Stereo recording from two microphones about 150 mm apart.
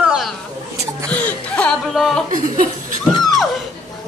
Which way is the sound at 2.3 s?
60° right (ahead or behind).